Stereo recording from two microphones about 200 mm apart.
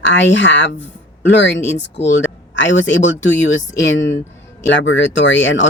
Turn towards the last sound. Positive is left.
turn(degrees=65)  # may be behind; listen again after turning